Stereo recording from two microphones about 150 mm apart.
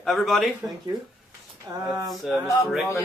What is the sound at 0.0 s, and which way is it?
Speech, centre (ahead or behind).